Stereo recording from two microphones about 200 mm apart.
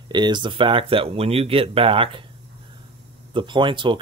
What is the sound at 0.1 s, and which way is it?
Speech, 20° right (ahead or behind).